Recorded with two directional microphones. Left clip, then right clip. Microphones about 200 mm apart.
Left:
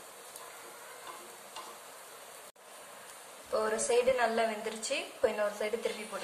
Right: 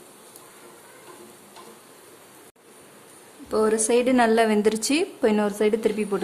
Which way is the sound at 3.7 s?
55° right (ahead or behind).